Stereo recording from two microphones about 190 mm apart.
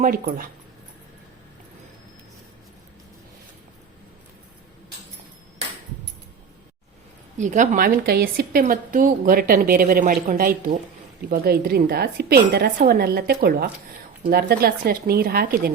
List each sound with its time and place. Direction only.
0.0 s a woman's voice: 50° right (ahead or behind)
7.3 s a woman's voice: 40° right (ahead or behind)